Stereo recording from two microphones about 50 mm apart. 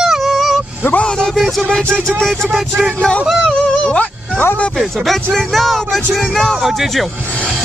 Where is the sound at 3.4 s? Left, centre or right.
Centre.